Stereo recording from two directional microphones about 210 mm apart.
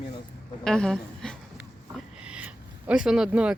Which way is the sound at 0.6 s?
5° left (ahead or behind).